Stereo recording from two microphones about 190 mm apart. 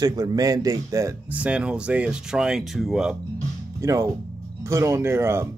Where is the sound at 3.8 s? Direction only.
15° right (ahead or behind).